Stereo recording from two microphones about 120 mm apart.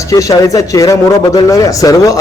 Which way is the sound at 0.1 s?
25° left (ahead or behind).